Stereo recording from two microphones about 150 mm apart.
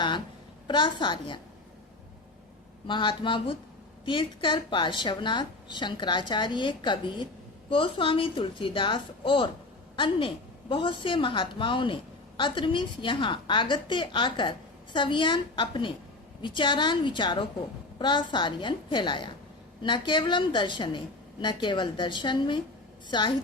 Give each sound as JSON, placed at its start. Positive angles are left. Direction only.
{"t": 0.7, "sound": "speech", "side_deg": 30}
{"t": 2.8, "sound": "speech", "side_deg": 30}